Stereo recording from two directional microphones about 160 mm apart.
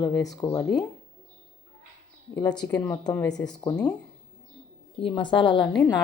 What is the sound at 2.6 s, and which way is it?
Speech, 10° left (ahead or behind).